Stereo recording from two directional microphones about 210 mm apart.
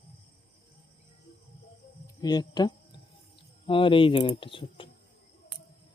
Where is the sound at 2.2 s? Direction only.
20° left (ahead or behind).